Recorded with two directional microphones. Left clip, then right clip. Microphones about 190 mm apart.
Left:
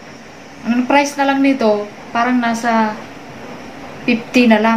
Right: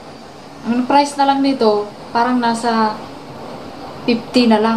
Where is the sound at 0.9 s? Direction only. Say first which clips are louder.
Right 1 dB; 25° left (ahead or behind).